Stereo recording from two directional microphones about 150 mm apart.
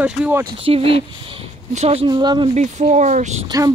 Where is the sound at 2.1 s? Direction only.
30° right (ahead or behind).